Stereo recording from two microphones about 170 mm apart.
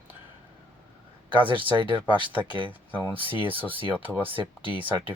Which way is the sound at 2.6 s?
10° right (ahead or behind).